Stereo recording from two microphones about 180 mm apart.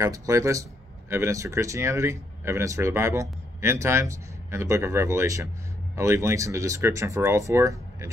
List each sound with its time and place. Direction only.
0.0 s speech: 15° right (ahead or behind)